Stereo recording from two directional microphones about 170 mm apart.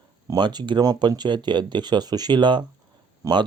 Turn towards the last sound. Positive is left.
turn(degrees=-25)  # may be behind; listen again after turning